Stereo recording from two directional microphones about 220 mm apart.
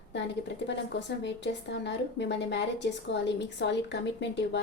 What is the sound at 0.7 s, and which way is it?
A woman's voice, 55° left (ahead or behind).